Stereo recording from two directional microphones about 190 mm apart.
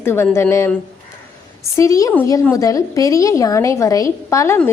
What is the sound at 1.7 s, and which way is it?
A woman's voice, 15° left (ahead or behind).